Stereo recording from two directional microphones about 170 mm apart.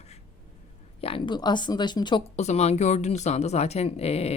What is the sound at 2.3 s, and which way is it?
Speech, 40° left (ahead or behind).